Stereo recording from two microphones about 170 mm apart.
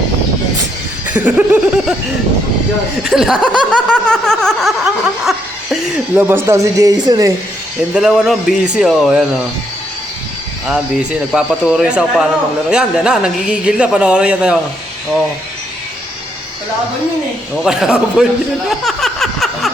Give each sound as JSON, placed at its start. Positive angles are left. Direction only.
{"t": 1.0, "sound": "speech", "side_deg": -10}
{"t": 3.0, "sound": "speech", "side_deg": -5}
{"t": 3.8, "sound": "a sound", "side_deg": 5}
{"t": 6.1, "sound": "a man's voice", "side_deg": -15}
{"t": 7.9, "sound": "speech", "side_deg": -5}
{"t": 10.7, "sound": "speech", "side_deg": -5}
{"t": 17.6, "sound": "speech", "side_deg": -5}
{"t": 18.9, "sound": "a sound", "side_deg": 0}